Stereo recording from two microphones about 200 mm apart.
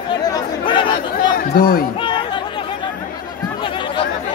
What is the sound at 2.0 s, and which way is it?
Chatter, 25° left (ahead or behind).